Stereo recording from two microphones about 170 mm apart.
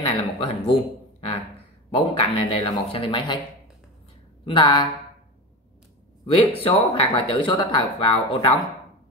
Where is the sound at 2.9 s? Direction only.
30° left (ahead or behind).